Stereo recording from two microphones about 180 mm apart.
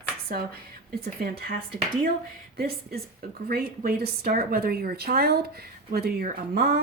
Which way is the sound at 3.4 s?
55° right (ahead or behind).